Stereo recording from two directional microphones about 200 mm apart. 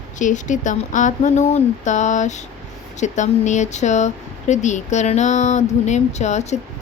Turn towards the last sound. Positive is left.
turn(degrees=35)  # may be behind; listen again after turning